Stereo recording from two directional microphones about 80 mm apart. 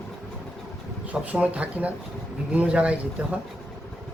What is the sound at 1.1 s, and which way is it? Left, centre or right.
A man's voice, centre.